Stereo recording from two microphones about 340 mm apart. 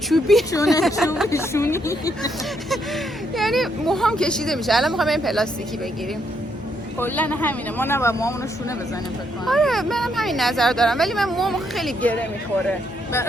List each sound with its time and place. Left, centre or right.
0.1 s speech: centre
0.8 s speech: centre
7.0 s speech: centre
9.5 s speech: centre